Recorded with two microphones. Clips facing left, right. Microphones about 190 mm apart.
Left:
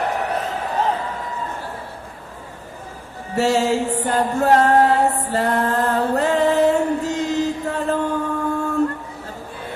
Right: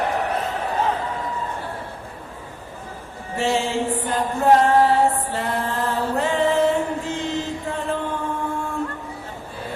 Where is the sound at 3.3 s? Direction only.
40° left (ahead or behind).